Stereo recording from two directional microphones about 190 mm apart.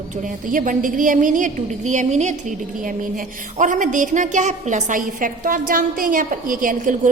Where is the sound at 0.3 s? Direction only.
45° right (ahead or behind).